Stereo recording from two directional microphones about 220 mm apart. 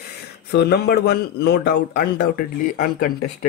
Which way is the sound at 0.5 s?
45° left (ahead or behind).